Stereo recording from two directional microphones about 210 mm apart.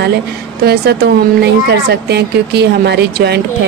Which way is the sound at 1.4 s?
50° right (ahead or behind).